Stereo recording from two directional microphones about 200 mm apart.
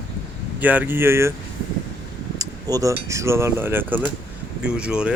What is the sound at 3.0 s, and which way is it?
A man's voice, 15° right (ahead or behind).